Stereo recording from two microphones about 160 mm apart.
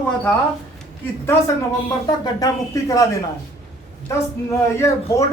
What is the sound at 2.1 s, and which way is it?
Speech, 25° left (ahead or behind).